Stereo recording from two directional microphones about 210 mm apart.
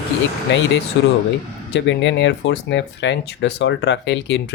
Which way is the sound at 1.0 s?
55° left (ahead or behind).